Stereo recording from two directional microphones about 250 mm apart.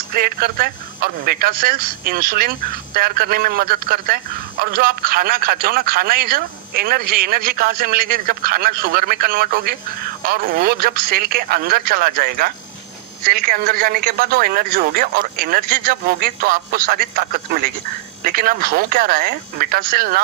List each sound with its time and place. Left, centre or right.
0.1 s speech: right